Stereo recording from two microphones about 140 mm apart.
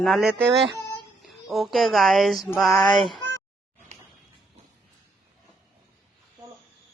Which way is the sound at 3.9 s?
60° right (ahead or behind).